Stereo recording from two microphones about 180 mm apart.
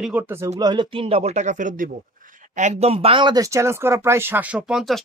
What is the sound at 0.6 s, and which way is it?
Speech, 25° right (ahead or behind).